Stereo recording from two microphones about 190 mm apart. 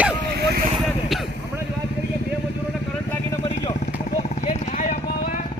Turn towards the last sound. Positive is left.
turn(degrees=35)  # may be behind; listen again after turning